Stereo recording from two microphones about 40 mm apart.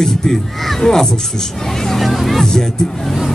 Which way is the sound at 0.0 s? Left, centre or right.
Centre.